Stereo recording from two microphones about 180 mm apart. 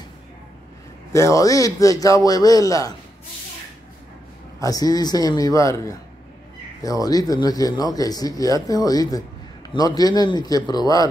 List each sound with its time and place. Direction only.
1.1 s speech: 15° left (ahead or behind)
4.6 s speech: 20° left (ahead or behind)